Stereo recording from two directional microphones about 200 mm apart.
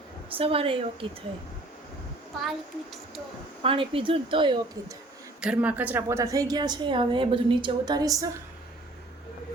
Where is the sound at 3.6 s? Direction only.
25° right (ahead or behind).